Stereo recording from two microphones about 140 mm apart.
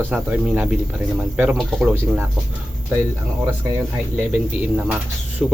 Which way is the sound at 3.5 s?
20° right (ahead or behind).